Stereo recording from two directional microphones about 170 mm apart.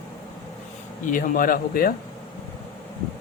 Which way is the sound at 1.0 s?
55° left (ahead or behind).